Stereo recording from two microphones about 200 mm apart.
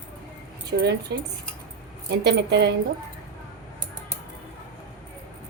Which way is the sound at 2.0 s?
60° right (ahead or behind).